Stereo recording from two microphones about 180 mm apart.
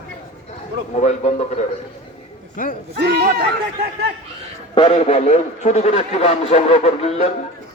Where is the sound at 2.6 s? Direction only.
50° left (ahead or behind).